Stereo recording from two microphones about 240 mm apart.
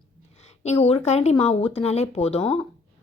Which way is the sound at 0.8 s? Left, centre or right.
Left.